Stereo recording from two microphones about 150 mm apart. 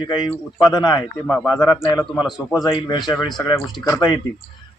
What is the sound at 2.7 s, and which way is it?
Speech, 30° left (ahead or behind).